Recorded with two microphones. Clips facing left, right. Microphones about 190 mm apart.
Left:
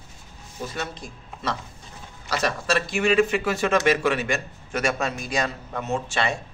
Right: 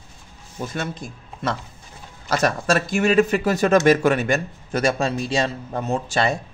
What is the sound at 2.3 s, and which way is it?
Speech, 45° right (ahead or behind).